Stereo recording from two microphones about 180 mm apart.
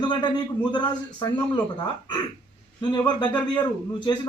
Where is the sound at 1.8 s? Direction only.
25° left (ahead or behind).